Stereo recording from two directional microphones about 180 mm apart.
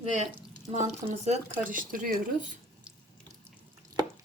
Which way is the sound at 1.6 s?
50° right (ahead or behind).